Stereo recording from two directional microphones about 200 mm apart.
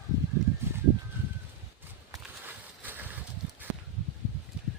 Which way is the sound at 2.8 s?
10° right (ahead or behind).